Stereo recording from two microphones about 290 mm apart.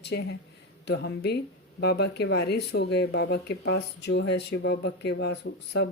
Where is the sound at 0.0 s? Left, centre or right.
Left.